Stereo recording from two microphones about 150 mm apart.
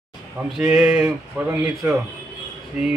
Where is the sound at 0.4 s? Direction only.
10° right (ahead or behind).